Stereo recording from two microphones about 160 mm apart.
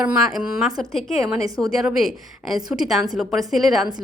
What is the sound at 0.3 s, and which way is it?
A woman's voice, centre (ahead or behind).